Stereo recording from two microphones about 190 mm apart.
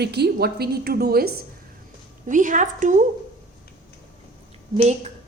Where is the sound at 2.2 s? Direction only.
45° right (ahead or behind).